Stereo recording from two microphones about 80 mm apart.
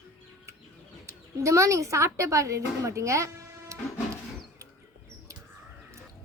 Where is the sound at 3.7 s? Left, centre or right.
Right.